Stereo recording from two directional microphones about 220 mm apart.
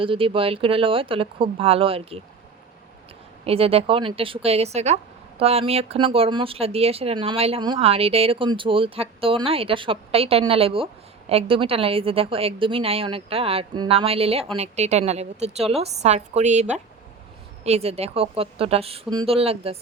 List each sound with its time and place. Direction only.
0.0 s speech: 25° right (ahead or behind)
3.4 s a woman's voice: 25° right (ahead or behind)